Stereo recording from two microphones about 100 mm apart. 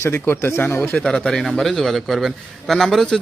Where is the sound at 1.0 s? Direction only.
10° left (ahead or behind).